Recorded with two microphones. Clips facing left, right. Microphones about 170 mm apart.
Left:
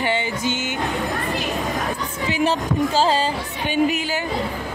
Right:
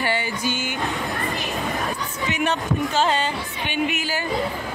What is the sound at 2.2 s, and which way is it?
Music, 30° left (ahead or behind).